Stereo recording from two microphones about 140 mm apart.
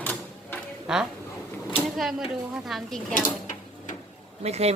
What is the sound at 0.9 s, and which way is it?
Speech, 5° right (ahead or behind).